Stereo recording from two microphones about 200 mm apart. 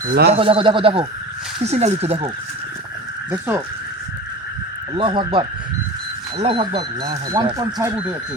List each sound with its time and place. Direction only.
0.1 s speech: 50° right (ahead or behind)
0.3 s speech: 25° right (ahead or behind)
4.9 s speech: 25° right (ahead or behind)